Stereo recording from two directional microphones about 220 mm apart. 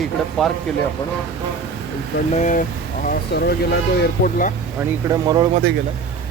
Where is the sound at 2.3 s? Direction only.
35° left (ahead or behind).